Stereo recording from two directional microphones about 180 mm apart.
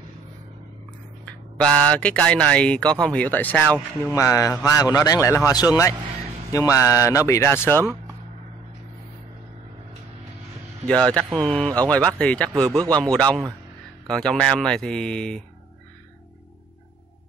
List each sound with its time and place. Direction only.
1.2 s speech: 5° left (ahead or behind)
10.9 s speech: 5° left (ahead or behind)